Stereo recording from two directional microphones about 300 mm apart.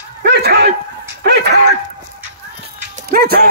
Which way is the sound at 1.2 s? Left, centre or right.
Right.